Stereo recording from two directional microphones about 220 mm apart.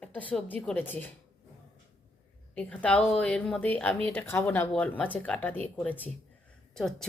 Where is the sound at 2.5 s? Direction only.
5° left (ahead or behind).